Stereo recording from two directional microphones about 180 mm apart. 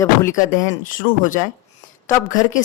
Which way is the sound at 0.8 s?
45° left (ahead or behind).